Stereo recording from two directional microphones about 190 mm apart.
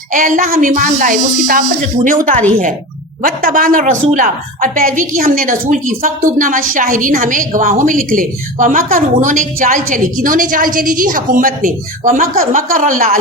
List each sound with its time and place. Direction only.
0.1 s a woman's voice: 45° right (ahead or behind)